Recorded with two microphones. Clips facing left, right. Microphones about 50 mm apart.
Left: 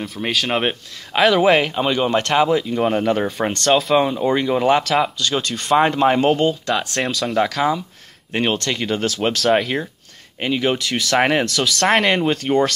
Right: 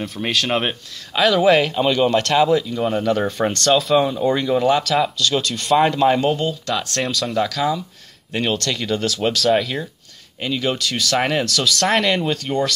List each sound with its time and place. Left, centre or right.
0.0 s speech: centre
1.1 s speech: left
6.7 s speech: left
7.0 s speech: centre
7.3 s speech: left
11.8 s speech: centre